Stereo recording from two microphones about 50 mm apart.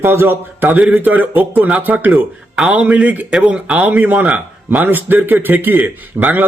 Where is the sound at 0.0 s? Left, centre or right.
Right.